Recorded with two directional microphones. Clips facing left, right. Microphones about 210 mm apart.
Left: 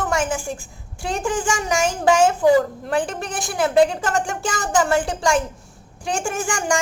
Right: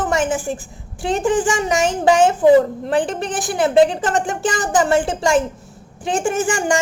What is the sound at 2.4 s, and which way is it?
Speech, 20° right (ahead or behind).